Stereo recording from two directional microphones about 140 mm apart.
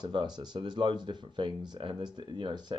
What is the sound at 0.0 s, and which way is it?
Speech, 30° right (ahead or behind).